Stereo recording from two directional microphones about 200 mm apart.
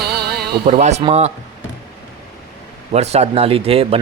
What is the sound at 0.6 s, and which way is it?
Speech, 35° right (ahead or behind).